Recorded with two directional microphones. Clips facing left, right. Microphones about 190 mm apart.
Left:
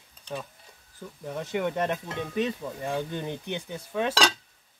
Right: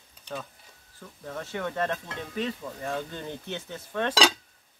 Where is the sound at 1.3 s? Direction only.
15° left (ahead or behind).